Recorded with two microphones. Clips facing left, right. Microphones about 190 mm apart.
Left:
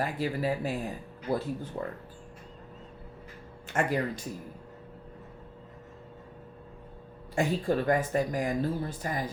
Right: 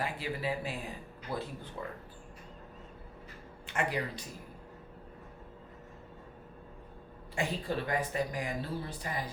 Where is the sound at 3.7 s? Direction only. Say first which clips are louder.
Left 5 dB; 45° left (ahead or behind).